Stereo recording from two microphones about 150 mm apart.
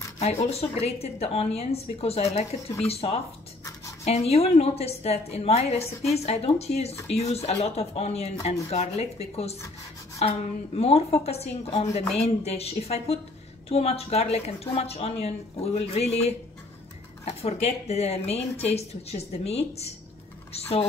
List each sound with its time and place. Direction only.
0.2 s a woman's voice: 45° left (ahead or behind)